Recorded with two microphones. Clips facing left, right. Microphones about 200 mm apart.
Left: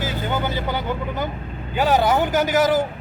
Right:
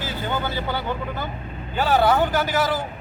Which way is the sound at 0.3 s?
15° left (ahead or behind).